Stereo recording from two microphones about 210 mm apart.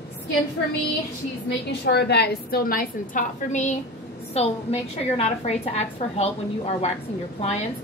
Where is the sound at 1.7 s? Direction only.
55° left (ahead or behind); by 6.9 s 30° left (ahead or behind).